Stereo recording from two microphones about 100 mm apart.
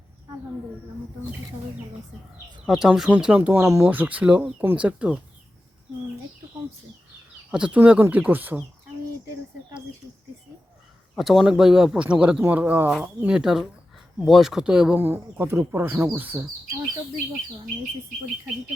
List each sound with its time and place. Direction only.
2.6 s speech: 5° right (ahead or behind)
3.6 s speech: 25° right (ahead or behind)
3.9 s speech: 15° right (ahead or behind)
7.5 s speech: 10° right (ahead or behind)
11.2 s speech: centre (ahead or behind)
14.9 s speech: 25° right (ahead or behind)